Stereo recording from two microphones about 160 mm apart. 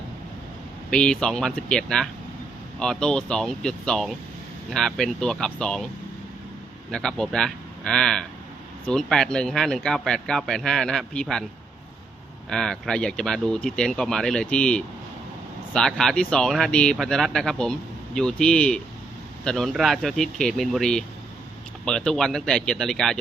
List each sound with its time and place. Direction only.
0.9 s speech: 5° left (ahead or behind)
6.9 s speech: 5° left (ahead or behind)
12.5 s speech: 5° left (ahead or behind)